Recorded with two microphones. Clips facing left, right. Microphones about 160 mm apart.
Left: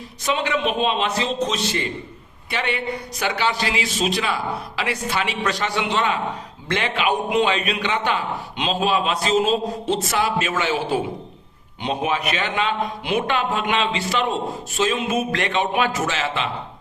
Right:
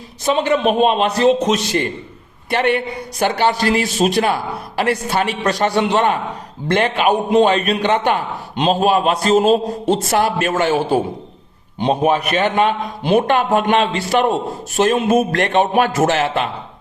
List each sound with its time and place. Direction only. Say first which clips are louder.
0.3 s a man's voice: right 8 dB; 45° right (ahead or behind)
7.1 s a man's voice: right 6 dB; 35° right (ahead or behind)
16.0 s a man's voice: right 8 dB; 60° right (ahead or behind)